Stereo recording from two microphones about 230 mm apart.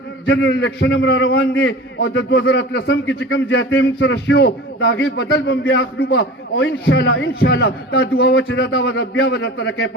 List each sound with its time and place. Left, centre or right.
0.3 s a man's voice: left